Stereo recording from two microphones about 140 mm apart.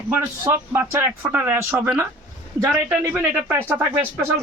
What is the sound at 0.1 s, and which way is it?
Speech, 15° right (ahead or behind).